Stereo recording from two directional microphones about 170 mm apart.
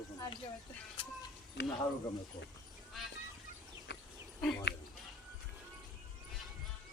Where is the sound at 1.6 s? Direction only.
90° left.